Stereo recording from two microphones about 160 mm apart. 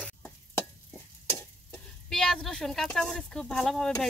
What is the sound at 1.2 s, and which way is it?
Stir, 15° left (ahead or behind).